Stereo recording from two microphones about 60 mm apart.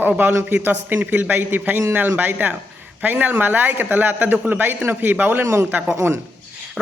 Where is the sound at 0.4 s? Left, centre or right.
Right.